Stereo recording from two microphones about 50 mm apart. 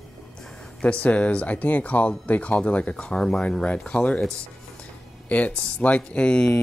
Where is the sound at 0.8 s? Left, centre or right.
Left.